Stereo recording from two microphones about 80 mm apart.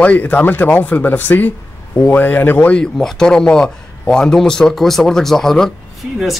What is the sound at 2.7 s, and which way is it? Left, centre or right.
A man's voice, centre.